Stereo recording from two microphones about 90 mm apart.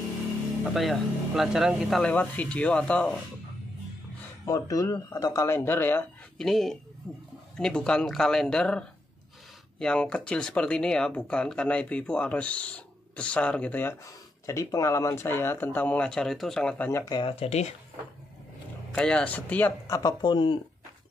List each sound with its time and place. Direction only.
0.7 s speech: centre (ahead or behind)
2.0 s speech: 15° left (ahead or behind)
4.5 s speech: 40° left (ahead or behind); by 6.0 s 25° left (ahead or behind)
6.3 s speech: 5° left (ahead or behind); by 13.9 s 20° left (ahead or behind)
14.0 s speech: 35° left (ahead or behind); by 16.1 s 20° left (ahead or behind)
16.1 s speech: 5° left (ahead or behind)
16.7 s speech: 25° left (ahead or behind)
17.4 s speech: 90° left
18.9 s speech: 10° left (ahead or behind)
19.9 s speech: 40° left (ahead or behind)
20.2 s speech: 60° left (ahead or behind)